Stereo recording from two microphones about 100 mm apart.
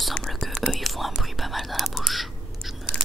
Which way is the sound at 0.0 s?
5° left (ahead or behind).